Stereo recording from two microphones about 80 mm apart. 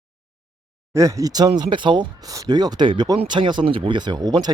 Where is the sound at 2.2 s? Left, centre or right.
Right.